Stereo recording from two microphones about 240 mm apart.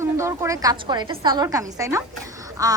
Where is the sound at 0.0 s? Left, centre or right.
Centre.